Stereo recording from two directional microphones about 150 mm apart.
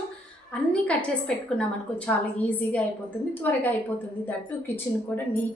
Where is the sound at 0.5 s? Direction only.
10° left (ahead or behind).